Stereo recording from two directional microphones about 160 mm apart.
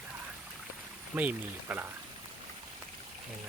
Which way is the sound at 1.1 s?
10° right (ahead or behind).